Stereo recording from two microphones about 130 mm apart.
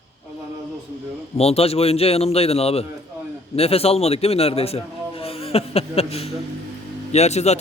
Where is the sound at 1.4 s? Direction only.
50° left (ahead or behind).